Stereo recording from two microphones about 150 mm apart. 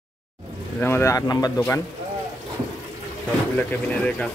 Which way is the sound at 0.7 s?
15° left (ahead or behind).